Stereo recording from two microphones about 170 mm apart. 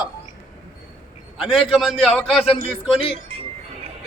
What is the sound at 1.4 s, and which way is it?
A man's voice, centre (ahead or behind).